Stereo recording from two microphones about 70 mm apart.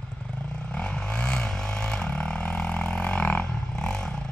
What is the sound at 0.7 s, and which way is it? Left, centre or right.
Vehicle, centre.